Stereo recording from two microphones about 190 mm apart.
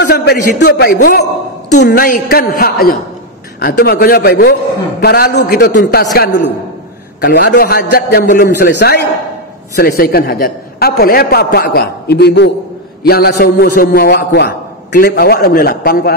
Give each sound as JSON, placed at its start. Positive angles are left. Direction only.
{"t": 0.1, "sound": "a man's voice", "side_deg": 60}